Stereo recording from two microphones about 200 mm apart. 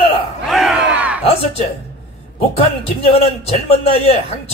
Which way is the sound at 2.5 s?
30° left (ahead or behind).